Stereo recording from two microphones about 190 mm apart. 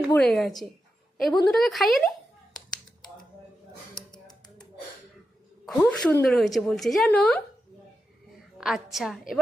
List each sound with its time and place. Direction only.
0.1 s a woman's voice: 5° left (ahead or behind)
4.1 s a sound: 20° left (ahead or behind)
5.6 s a woman's voice: 5° left (ahead or behind)
8.5 s a woman's voice: centre (ahead or behind)